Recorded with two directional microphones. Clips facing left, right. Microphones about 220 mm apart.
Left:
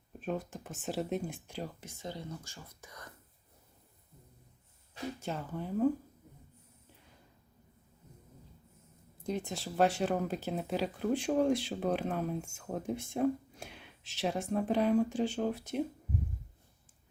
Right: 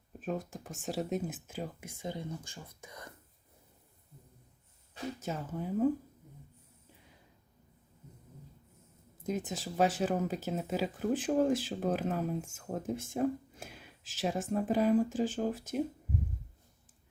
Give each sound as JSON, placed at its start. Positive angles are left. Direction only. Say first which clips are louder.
{"t": 0.2, "sound": "speech", "louder": "even", "side_deg": 0}
{"t": 2.1, "sound": "speech", "louder": "right 3 dB", "side_deg": -55}
{"t": 5.2, "sound": "speech", "louder": "right 2 dB", "side_deg": -5}
{"t": 9.2, "sound": "speech", "louder": "right 1 dB", "side_deg": -5}